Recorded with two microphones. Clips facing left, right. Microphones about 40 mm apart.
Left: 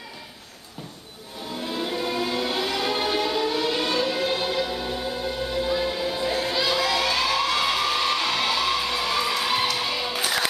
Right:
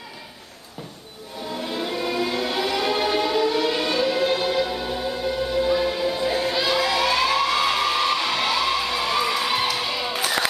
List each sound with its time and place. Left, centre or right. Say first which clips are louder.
1.5 s music: right 1 dB; centre